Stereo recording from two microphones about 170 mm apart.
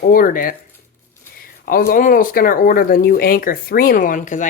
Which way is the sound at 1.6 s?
60° left (ahead or behind).